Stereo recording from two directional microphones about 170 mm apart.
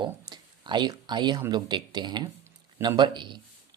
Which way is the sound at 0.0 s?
25° right (ahead or behind).